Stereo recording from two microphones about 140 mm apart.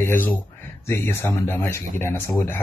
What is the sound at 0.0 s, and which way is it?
Speech, 15° left (ahead or behind).